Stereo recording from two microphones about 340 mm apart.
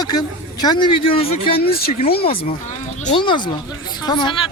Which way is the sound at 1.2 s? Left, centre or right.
Left.